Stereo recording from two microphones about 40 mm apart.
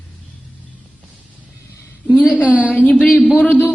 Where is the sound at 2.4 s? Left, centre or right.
Right.